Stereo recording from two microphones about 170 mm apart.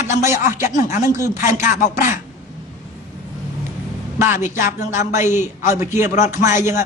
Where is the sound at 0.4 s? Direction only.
50° left (ahead or behind).